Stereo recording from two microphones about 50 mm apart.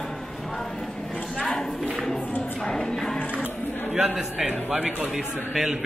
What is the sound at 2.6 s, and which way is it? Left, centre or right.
Music, centre.